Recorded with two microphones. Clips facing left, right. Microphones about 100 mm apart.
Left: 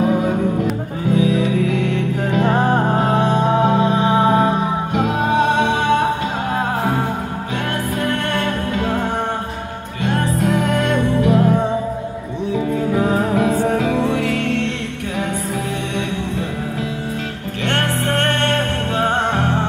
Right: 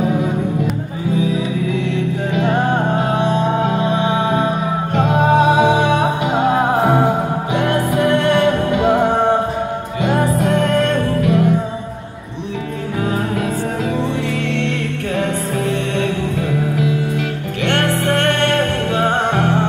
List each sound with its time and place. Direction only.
1.1 s music: 65° left (ahead or behind)
2.3 s music: 35° left (ahead or behind)
4.1 s music: 35° left (ahead or behind)
4.9 s music: centre (ahead or behind); by 9.4 s 15° right (ahead or behind)
10.4 s music: 5° left (ahead or behind)
11.1 s music: 30° left (ahead or behind)
17.6 s music: 35° left (ahead or behind)